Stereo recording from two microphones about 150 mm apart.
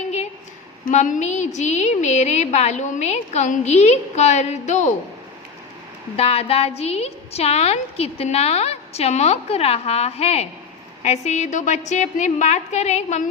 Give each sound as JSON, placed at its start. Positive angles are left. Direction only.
{"t": 0.9, "sound": "a woman's voice", "side_deg": 60}
{"t": 6.1, "sound": "a woman's voice", "side_deg": 40}